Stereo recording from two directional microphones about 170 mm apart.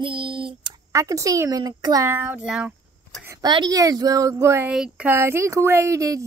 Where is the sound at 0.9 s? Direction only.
20° right (ahead or behind).